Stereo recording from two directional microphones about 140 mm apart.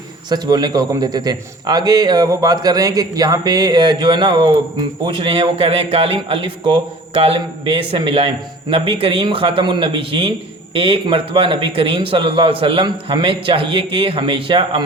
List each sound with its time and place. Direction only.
0.3 s a man's voice: 30° right (ahead or behind)